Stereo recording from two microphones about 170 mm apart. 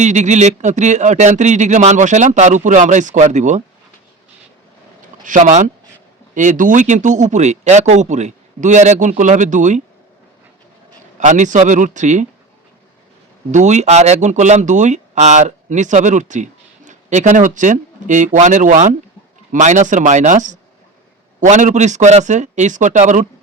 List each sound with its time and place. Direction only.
0.0 s speech: 45° right (ahead or behind)
5.2 s speech: 45° right (ahead or behind)
11.2 s speech: 45° right (ahead or behind)
13.5 s speech: 45° right (ahead or behind)